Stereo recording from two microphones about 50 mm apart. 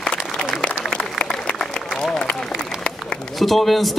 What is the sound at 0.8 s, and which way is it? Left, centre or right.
Applause, centre.